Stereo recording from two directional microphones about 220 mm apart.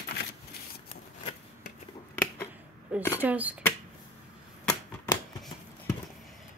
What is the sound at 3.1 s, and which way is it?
Speech, 5° right (ahead or behind).